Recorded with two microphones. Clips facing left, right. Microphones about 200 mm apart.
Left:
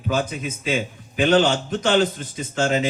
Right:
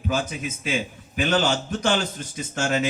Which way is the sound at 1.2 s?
60° left (ahead or behind).